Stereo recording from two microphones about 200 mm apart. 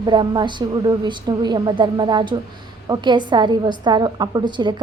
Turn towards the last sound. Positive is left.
turn(degrees=-20)  # may be behind; listen again after turning